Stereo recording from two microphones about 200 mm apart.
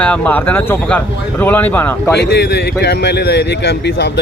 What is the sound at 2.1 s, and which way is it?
Speech, 55° left (ahead or behind).